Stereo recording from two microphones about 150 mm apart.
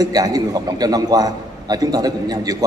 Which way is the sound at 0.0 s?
25° right (ahead or behind).